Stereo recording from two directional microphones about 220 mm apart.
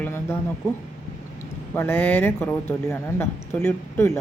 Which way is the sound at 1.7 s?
10° left (ahead or behind).